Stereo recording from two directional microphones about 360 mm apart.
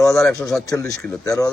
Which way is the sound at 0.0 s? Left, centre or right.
Centre.